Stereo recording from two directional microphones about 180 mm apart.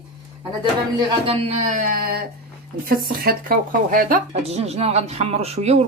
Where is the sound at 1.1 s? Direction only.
30° right (ahead or behind); by 4.4 s 50° right (ahead or behind).